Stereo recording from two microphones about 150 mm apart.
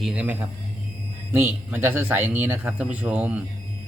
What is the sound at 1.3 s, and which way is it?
Speech, 15° right (ahead or behind).